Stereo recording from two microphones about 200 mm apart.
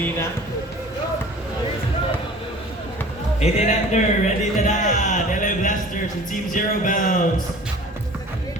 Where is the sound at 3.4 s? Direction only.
35° left (ahead or behind).